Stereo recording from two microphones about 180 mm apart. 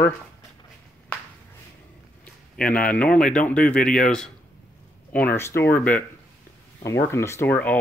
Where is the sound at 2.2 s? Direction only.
5° left (ahead or behind).